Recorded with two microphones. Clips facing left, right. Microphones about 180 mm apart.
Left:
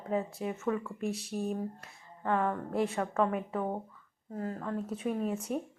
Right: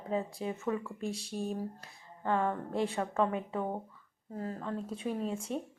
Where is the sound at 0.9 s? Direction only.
30° right (ahead or behind).